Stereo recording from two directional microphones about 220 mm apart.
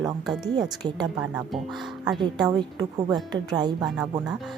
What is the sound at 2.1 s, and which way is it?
A woman's voice, 20° right (ahead or behind).